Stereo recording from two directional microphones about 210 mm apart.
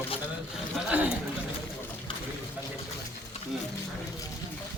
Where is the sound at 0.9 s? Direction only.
5° right (ahead or behind).